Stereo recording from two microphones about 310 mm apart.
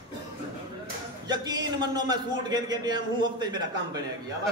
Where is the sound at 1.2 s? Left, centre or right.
Centre.